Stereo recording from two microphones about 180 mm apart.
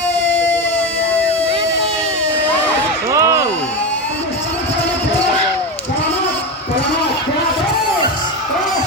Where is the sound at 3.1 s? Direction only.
15° right (ahead or behind).